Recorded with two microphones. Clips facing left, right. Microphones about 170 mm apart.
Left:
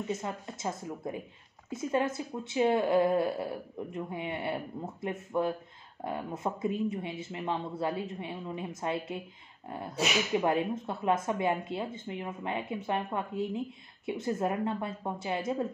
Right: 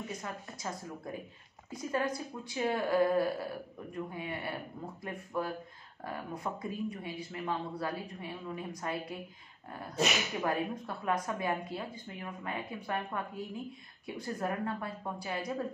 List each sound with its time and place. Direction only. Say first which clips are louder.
0.1 s speech: left 6 dB; 25° left (ahead or behind)